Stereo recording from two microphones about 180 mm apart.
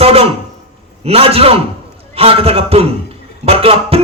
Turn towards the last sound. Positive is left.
turn(degrees=-35)  # may be behind; listen again after turning